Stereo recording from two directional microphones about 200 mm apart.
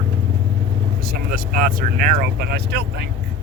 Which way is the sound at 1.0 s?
50° right (ahead or behind).